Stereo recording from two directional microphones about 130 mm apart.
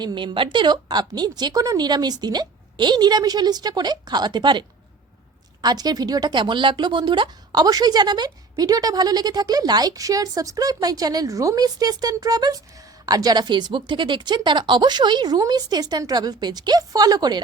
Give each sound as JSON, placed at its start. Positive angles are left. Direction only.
{"t": 0.0, "sound": "speech", "side_deg": -35}
{"t": 5.6, "sound": "speech", "side_deg": -30}